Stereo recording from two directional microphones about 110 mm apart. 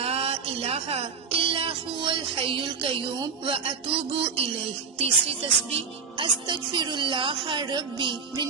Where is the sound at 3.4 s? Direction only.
60° right (ahead or behind).